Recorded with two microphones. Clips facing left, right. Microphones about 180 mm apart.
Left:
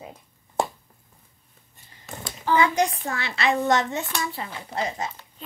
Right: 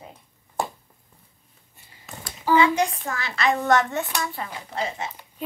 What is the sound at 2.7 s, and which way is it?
Speech, 35° left (ahead or behind).